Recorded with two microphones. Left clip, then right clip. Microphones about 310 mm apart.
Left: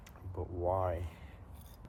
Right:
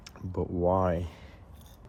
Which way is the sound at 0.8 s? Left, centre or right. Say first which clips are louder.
Right 7 dB; right.